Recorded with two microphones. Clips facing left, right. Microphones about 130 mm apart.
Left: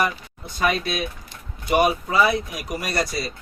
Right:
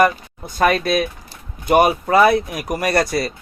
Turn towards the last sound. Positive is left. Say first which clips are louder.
# right 7 dB
turn(degrees=-60)  # may be behind; listen again after turning